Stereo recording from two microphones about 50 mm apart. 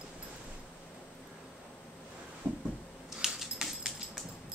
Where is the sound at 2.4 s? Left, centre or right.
Right.